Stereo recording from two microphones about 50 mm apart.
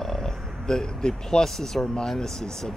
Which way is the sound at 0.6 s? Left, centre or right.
Centre.